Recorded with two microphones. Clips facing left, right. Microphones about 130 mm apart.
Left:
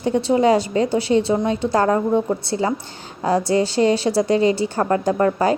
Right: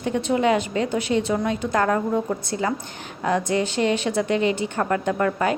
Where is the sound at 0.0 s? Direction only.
30° left (ahead or behind).